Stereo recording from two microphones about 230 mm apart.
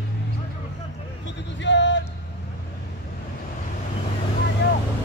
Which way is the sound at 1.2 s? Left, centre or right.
Left.